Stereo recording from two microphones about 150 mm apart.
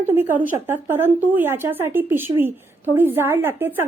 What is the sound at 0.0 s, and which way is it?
A woman's voice, 15° right (ahead or behind).